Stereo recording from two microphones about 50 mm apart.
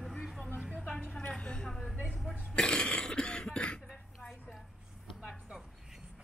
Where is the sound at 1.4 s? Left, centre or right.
Left.